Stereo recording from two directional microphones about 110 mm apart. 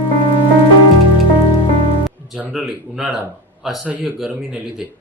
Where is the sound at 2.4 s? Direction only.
5° right (ahead or behind).